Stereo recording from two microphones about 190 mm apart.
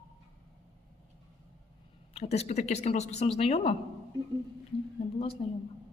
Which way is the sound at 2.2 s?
35° left (ahead or behind).